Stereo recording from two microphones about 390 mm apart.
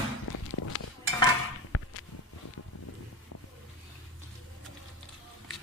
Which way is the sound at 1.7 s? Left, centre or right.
Left.